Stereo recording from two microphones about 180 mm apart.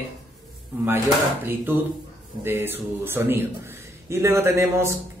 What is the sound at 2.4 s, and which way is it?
Speech, 10° right (ahead or behind).